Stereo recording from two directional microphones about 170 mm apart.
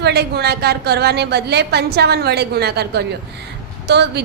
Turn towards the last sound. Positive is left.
turn(degrees=-80)